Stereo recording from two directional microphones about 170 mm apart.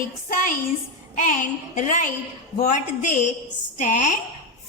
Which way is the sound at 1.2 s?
50° left (ahead or behind).